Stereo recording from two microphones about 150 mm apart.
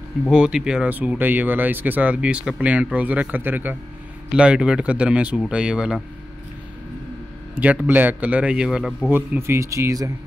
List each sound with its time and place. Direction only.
0.3 s speech: 5° right (ahead or behind)
7.6 s speech: 10° right (ahead or behind)
9.1 s speech: 15° right (ahead or behind)